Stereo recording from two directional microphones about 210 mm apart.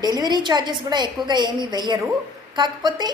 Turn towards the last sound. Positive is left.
turn(degrees=-20)  # may be behind; listen again after turning